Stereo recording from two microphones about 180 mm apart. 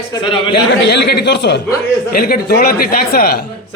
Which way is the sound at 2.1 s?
55° left (ahead or behind).